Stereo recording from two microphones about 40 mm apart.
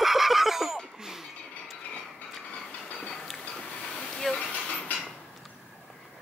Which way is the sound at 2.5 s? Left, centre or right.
Left.